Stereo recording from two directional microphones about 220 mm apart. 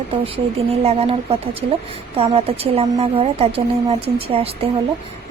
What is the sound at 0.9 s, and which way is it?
A woman's voice, 25° right (ahead or behind).